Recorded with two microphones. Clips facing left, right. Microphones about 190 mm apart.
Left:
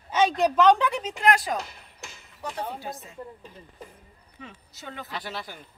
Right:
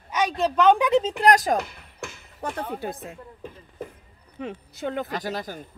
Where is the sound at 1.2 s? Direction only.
45° right (ahead or behind).